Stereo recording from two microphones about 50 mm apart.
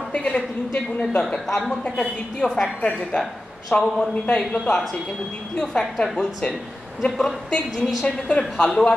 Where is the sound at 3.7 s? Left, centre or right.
Left.